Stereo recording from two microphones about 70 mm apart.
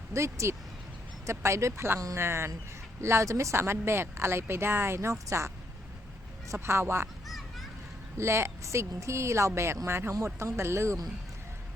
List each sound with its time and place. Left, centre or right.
0.1 s speech: right
6.5 s speech: right
7.3 s children playing: centre
8.2 s speech: right